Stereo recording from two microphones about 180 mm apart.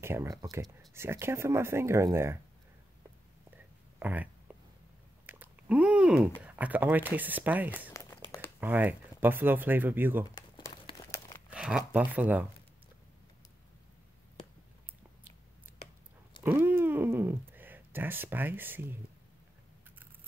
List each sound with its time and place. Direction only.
0.0 s speech: 15° right (ahead or behind)
4.0 s a sound: 10° right (ahead or behind)
5.2 s chewing: 10° right (ahead or behind)
6.4 s speech: 10° right (ahead or behind)
7.9 s crumpling: 15° left (ahead or behind)
8.5 s speech: 10° right (ahead or behind)
10.5 s crumpling: 25° left (ahead or behind)
11.5 s speech: 5° right (ahead or behind)
16.4 s a sound: 10° right (ahead or behind)